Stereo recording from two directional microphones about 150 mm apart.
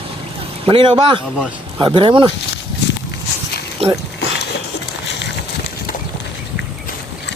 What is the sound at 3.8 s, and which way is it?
Speech, 40° right (ahead or behind).